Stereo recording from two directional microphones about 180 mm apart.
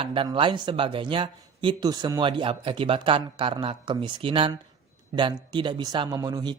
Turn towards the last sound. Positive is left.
turn(degrees=-20)  # may be behind; listen again after turning